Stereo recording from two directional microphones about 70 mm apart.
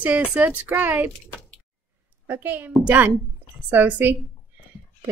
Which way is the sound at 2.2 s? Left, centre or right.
Right.